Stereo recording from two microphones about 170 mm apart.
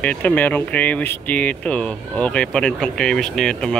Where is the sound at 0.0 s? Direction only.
10° left (ahead or behind).